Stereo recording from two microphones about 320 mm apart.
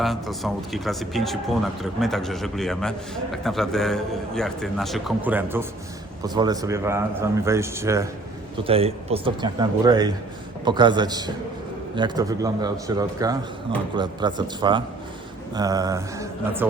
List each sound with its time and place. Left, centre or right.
0.0 s speech: centre